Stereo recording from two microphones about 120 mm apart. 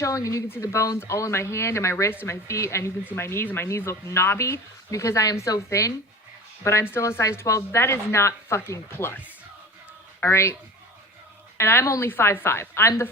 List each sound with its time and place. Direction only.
0.0 s speech: 25° left (ahead or behind)
11.5 s speech: 20° left (ahead or behind)